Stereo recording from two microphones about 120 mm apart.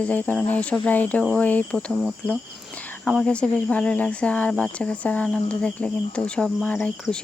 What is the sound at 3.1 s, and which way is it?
Speech, 5° left (ahead or behind).